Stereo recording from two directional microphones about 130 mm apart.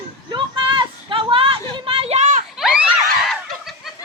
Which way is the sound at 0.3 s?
35° right (ahead or behind).